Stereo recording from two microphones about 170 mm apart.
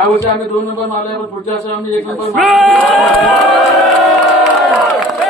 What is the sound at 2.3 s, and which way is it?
Speech, centre (ahead or behind).